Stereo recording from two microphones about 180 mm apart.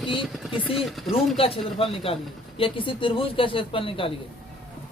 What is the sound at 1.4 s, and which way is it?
A man's voice, 30° left (ahead or behind).